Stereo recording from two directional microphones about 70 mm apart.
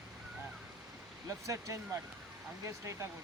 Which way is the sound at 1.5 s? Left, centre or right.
Right.